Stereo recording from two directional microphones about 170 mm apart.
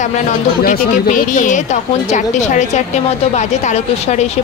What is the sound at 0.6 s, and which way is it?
A woman's voice, 55° left (ahead or behind).